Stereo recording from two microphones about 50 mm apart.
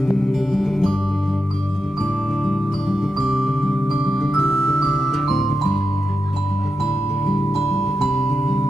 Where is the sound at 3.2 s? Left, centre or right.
Centre.